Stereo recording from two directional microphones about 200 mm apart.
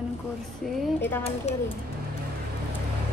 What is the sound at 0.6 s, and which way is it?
Speech, centre (ahead or behind).